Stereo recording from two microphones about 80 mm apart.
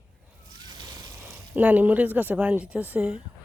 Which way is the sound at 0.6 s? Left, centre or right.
Right.